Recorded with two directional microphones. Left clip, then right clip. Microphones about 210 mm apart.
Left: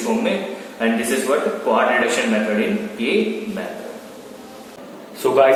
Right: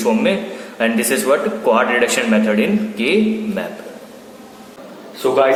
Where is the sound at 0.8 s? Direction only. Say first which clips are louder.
Right 3 dB; 55° right (ahead or behind).